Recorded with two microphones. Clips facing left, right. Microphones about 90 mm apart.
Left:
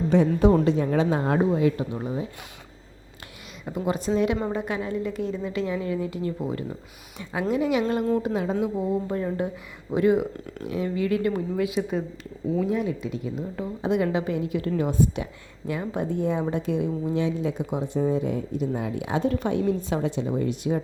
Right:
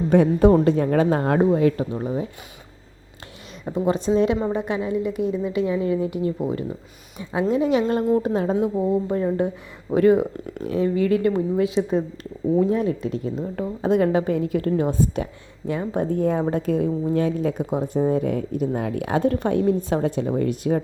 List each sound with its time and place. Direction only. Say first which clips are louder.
0.1 s speech: right 4 dB; 45° right (ahead or behind)
3.7 s a woman's voice: right 5 dB; 30° right (ahead or behind)
9.9 s speech: right 4 dB; 45° right (ahead or behind)
10.4 s a woman's voice: right 6 dB; 35° right (ahead or behind)
12.6 s a woman's voice: right 4 dB; 40° right (ahead or behind)